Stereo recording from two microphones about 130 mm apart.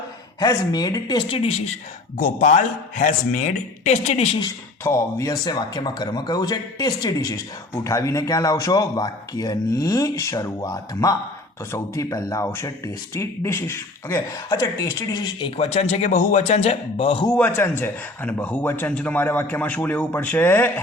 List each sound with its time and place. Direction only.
0.3 s speech: 30° left (ahead or behind)
1.3 s a woman's voice: 50° left (ahead or behind)
2.1 s a man's voice: 85° left; by 4.4 s 55° left (ahead or behind)
4.8 s speech: 20° left (ahead or behind); by 17.2 s 45° left (ahead or behind)
17.3 s speech: 15° left (ahead or behind)